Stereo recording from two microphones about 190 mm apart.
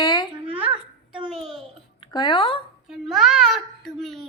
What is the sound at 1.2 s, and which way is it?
Speech, centre (ahead or behind).